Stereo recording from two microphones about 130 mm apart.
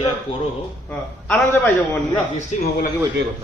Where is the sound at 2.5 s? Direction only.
65° left (ahead or behind).